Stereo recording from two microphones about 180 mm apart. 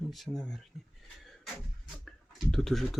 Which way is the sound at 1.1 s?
Centre (ahead or behind).